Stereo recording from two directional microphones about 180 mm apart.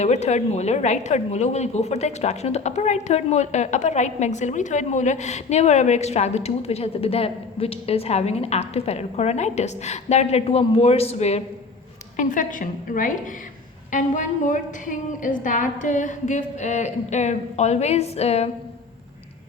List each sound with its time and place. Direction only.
0.0 s a woman's voice: 40° left (ahead or behind)
12.1 s a woman's voice: 45° left (ahead or behind)